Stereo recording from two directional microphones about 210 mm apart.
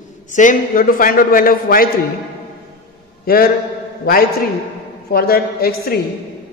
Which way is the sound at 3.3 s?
45° left (ahead or behind).